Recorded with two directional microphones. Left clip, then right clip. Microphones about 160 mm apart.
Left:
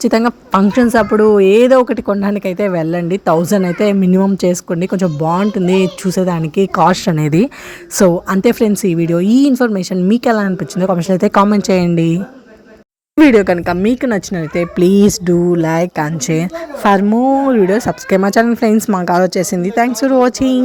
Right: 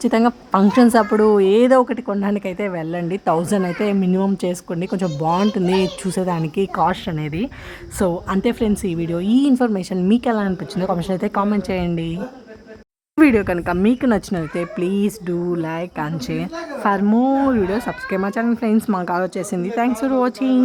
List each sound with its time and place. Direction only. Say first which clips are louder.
0.0 s a woman's voice: left 4 dB; 20° left (ahead or behind)
1.9 s speech: left 6 dB; 25° left (ahead or behind); by 7.5 s 45° left (ahead or behind)
7.9 s a woman's voice: left 9 dB; 30° left (ahead or behind)
13.1 s speech: left 6 dB; 20° left (ahead or behind)
15.1 s a woman's voice: left 10 dB; 30° left (ahead or behind)
17.1 s speech: left 5 dB; 5° left (ahead or behind)
17.4 s speech: left 7 dB; 20° left (ahead or behind)
18.8 s speech: left 5 dB; 10° left (ahead or behind)
19.0 s speech: left 9 dB; 30° left (ahead or behind)